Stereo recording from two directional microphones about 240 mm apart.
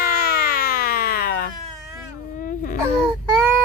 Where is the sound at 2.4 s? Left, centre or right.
Left.